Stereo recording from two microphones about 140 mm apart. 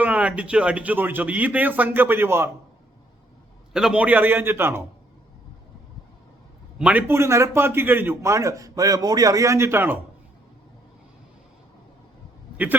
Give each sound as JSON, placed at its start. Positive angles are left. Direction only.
{"t": 0.0, "sound": "a man's voice", "side_deg": -10}
{"t": 3.7, "sound": "a man's voice", "side_deg": -5}
{"t": 6.7, "sound": "a man's voice", "side_deg": -10}